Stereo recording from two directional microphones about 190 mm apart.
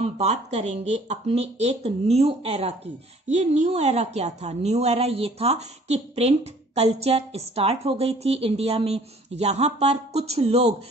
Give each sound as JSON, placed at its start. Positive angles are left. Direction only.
{"t": 0.0, "sound": "a woman's voice", "side_deg": -35}